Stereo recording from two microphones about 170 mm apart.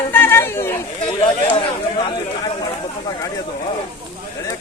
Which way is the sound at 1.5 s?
30° left (ahead or behind).